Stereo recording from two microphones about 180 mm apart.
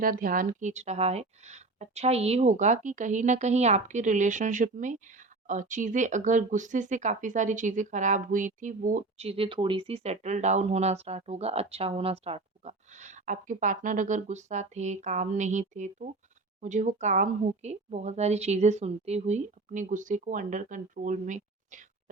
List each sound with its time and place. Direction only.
0.0 s speech: 50° right (ahead or behind)